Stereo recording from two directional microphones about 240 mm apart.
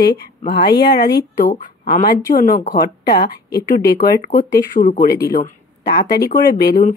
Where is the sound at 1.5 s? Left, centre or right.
Left.